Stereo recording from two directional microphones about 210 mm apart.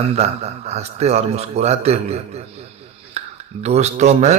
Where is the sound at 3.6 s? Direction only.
30° right (ahead or behind).